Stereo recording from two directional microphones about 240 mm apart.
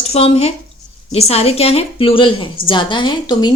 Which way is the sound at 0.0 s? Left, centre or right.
Left.